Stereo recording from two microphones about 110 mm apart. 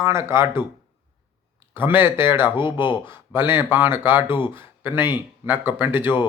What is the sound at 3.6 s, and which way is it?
Speech, 20° right (ahead or behind).